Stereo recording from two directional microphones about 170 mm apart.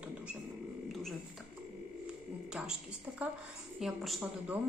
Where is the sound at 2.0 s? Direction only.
5° right (ahead or behind).